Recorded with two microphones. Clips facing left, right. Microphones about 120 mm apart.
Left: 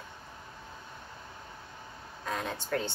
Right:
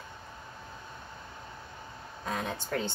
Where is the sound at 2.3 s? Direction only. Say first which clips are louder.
Even; 5° right (ahead or behind).